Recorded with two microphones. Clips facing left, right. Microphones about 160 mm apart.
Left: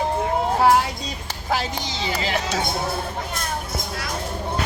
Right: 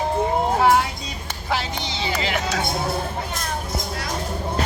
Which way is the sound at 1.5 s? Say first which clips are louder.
Left 1 dB; 40° left (ahead or behind).